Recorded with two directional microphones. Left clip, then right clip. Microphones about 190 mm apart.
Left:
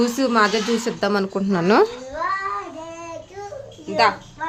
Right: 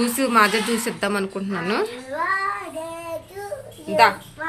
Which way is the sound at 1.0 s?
30° left (ahead or behind).